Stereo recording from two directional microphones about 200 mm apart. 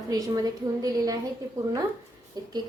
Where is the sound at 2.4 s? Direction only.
20° right (ahead or behind).